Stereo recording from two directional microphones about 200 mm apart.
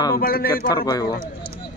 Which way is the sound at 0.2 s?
50° left (ahead or behind).